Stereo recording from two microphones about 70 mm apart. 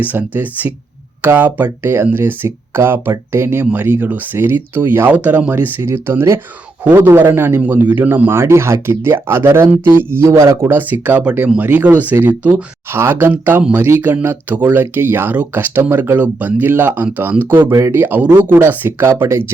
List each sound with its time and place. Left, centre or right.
0.0 s speech: right
5.8 s speech: right
6.8 s speech: right
7.3 s speech: right
8.3 s speech: right
10.3 s speech: right
10.6 s speech: right
12.9 s speech: right
19.0 s speech: right